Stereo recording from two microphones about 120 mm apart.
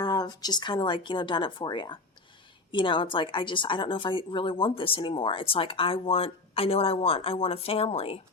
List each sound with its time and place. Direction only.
0.0 s a woman's voice: 35° left (ahead or behind); by 8.2 s 55° left (ahead or behind)